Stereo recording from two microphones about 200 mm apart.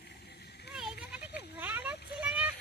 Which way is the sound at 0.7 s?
5° right (ahead or behind).